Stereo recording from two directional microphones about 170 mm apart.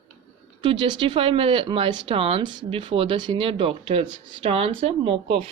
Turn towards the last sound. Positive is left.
turn(degrees=-35)  # may be behind; listen again after turning